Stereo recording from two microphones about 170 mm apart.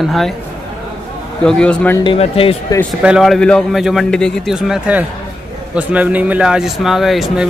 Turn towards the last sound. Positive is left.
turn(degrees=0)  # may be behind; listen again after turning